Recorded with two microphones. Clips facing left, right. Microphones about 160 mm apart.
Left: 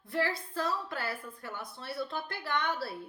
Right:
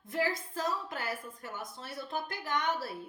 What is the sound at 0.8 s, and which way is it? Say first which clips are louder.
Speech: left 2 dB; 15° right (ahead or behind).